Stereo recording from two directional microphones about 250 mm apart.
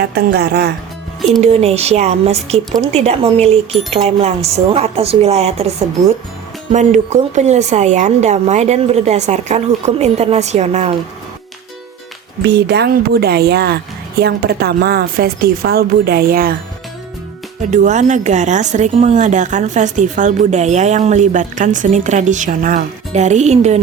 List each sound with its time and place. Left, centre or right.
0.0 s a woman's voice: right
1.4 s a woman's voice: right
12.4 s a woman's voice: right
17.7 s a woman's voice: right